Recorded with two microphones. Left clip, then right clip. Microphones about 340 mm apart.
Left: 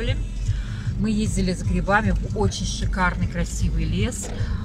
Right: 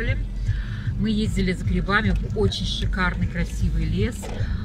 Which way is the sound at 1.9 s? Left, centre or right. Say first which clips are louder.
Left 2 dB; centre.